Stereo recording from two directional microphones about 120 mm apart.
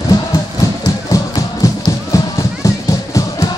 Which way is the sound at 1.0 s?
30° left (ahead or behind).